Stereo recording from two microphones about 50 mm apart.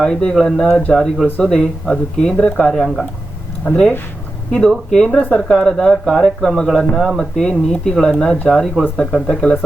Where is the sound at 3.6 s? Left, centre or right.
Centre.